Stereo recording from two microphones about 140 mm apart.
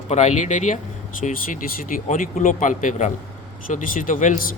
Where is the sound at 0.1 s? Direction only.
55° left (ahead or behind).